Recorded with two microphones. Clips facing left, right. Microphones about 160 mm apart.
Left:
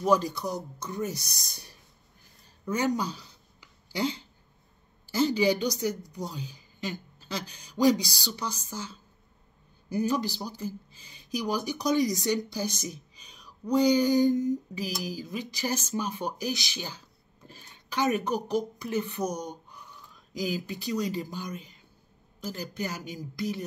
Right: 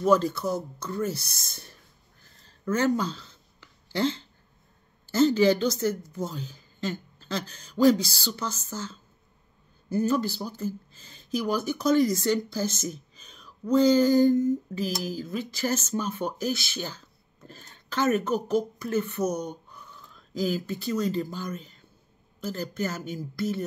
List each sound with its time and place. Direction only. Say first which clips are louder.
0.0 s a woman's voice: right 3 dB; 15° left (ahead or behind)
2.2 s a sound: right 4 dB; 15° left (ahead or behind)
5.1 s a woman's voice: right 4 dB; 10° left (ahead or behind)